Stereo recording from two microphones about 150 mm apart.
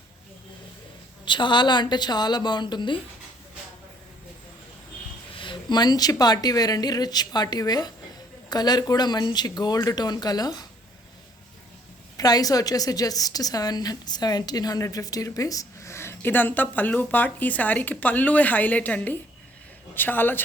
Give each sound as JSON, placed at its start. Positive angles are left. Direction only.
{"t": 1.2, "sound": "a woman's voice", "side_deg": 30}
{"t": 5.3, "sound": "a woman's voice", "side_deg": 35}
{"t": 12.1, "sound": "a woman's voice", "side_deg": 25}